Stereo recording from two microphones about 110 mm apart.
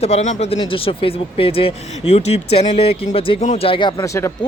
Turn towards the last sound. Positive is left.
turn(degrees=30)  # may be behind; listen again after turning